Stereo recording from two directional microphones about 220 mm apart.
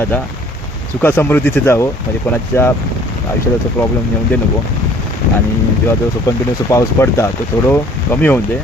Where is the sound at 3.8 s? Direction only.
10° left (ahead or behind).